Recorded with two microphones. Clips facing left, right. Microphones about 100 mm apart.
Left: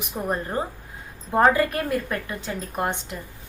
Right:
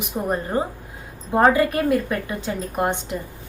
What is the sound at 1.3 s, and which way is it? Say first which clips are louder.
A woman's voice: right 2 dB; 5° right (ahead or behind).